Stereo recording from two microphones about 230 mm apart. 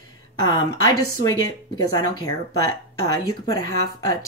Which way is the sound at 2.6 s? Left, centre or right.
Centre.